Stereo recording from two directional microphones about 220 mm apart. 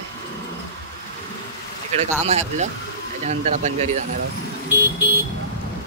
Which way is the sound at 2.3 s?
30° right (ahead or behind).